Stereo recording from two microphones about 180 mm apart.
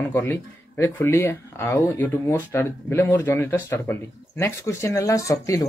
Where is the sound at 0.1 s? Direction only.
15° left (ahead or behind).